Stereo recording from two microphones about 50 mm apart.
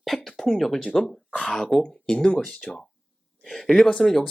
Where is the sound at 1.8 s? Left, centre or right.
Centre.